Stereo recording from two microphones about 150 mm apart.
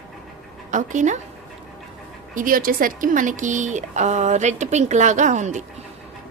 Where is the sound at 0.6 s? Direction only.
55° right (ahead or behind).